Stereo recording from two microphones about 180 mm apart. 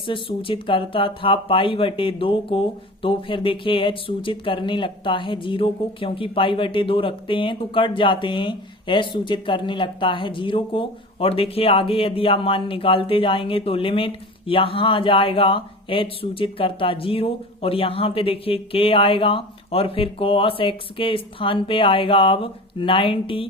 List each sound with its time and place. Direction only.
0.0 s speech: 30° left (ahead or behind)